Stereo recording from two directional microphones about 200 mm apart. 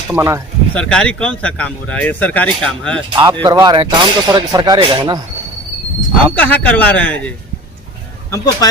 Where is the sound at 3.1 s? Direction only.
20° right (ahead or behind).